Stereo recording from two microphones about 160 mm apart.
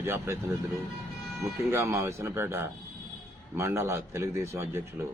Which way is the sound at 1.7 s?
20° right (ahead or behind).